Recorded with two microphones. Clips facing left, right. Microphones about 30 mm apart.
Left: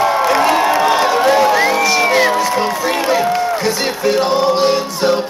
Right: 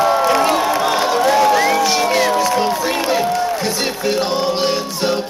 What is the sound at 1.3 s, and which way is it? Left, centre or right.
Crowd, centre.